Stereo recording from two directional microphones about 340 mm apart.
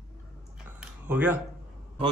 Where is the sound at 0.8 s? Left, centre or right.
Centre.